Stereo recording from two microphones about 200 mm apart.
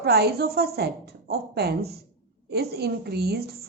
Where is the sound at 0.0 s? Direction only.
50° right (ahead or behind).